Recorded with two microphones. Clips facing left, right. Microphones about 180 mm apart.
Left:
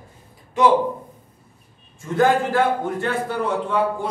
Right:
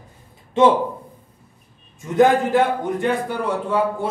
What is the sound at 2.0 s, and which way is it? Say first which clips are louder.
A man's voice: right 3 dB; 20° right (ahead or behind).